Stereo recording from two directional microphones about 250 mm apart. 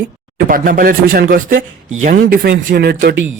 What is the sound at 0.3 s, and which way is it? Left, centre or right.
A man's voice, right.